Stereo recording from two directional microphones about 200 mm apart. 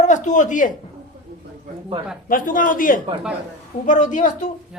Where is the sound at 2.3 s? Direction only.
45° left (ahead or behind).